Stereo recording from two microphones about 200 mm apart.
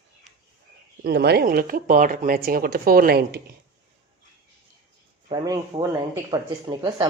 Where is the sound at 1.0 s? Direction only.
55° right (ahead or behind).